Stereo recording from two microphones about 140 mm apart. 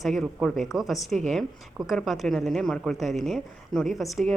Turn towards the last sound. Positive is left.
turn(degrees=0)  # may be behind; listen again after turning